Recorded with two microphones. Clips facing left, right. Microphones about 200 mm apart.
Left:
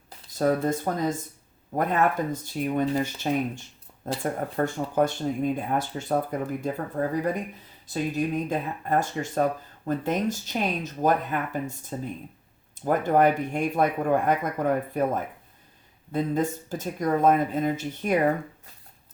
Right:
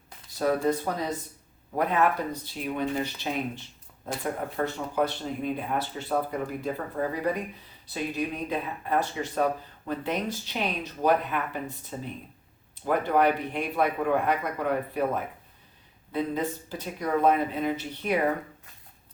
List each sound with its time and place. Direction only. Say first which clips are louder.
0.3 s speech: left 1 dB; 45° left (ahead or behind)